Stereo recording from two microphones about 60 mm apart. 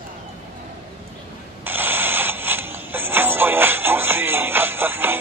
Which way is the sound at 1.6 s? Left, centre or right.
Right.